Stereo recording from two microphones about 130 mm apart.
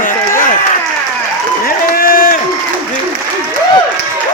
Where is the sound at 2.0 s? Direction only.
90° left.